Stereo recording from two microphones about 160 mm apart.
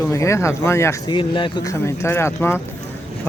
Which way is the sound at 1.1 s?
30° left (ahead or behind).